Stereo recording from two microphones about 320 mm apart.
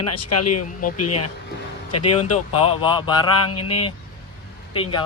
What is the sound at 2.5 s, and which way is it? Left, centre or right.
Speech, centre.